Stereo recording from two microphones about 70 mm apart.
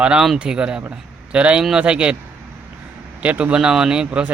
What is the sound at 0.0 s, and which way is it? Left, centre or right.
Speech, centre.